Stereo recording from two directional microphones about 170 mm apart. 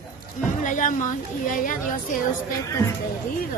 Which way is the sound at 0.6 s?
50° left (ahead or behind).